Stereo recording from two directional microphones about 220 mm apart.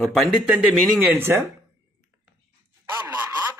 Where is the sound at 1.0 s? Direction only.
10° right (ahead or behind).